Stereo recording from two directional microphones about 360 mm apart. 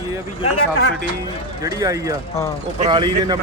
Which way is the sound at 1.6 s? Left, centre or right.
Centre.